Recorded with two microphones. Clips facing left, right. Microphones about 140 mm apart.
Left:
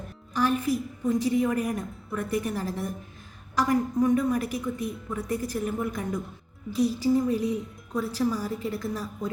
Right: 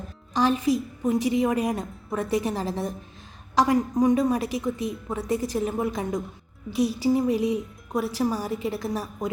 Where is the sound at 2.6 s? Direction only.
25° right (ahead or behind).